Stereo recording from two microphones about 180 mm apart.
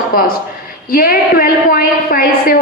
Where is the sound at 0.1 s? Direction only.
55° left (ahead or behind).